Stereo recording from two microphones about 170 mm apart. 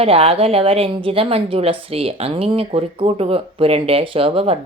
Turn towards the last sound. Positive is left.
turn(degrees=-35)  # may be behind; listen again after turning